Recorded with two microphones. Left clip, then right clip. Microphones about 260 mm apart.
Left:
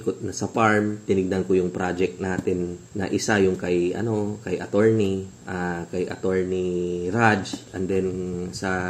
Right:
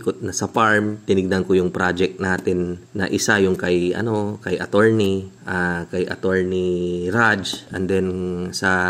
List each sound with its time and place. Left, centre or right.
0.0 s speech: right